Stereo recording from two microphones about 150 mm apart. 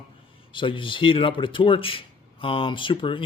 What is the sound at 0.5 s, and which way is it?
Speech, 35° left (ahead or behind).